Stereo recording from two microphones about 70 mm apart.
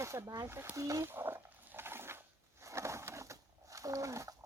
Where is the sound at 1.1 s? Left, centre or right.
Right.